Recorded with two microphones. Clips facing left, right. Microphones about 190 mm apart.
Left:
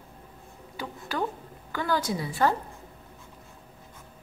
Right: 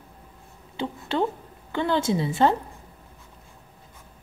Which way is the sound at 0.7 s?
25° right (ahead or behind).